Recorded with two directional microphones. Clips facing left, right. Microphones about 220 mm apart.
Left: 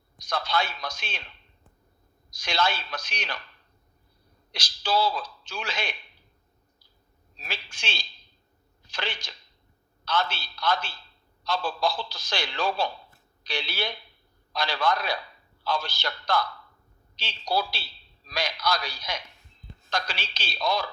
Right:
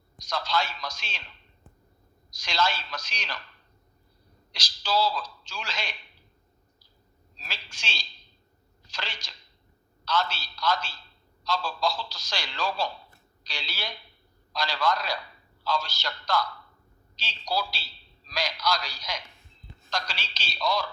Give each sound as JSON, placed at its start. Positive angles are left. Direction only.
{"t": 0.2, "sound": "a man's voice", "side_deg": 55}
{"t": 2.3, "sound": "a man's voice", "side_deg": 55}
{"t": 4.5, "sound": "a man's voice", "side_deg": 55}
{"t": 7.3, "sound": "a man's voice", "side_deg": 55}
{"t": 17.5, "sound": "a man's voice", "side_deg": 55}